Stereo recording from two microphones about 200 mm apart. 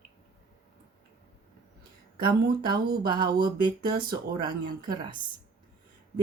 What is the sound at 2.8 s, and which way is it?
Speech, 50° right (ahead or behind).